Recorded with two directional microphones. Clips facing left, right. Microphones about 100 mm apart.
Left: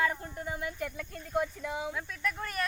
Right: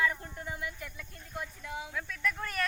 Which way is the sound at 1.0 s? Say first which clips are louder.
Left 10 dB; 80° left.